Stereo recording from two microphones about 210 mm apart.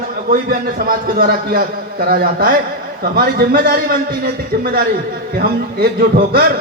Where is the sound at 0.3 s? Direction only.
45° right (ahead or behind).